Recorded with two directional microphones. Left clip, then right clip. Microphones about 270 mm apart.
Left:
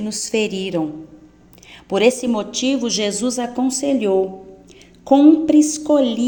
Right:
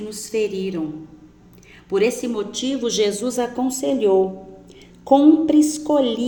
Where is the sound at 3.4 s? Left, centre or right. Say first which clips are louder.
Left 2 dB; left.